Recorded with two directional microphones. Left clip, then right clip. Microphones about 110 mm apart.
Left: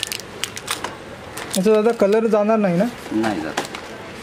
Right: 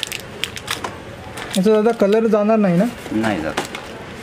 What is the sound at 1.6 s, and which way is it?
Speech, 5° left (ahead or behind).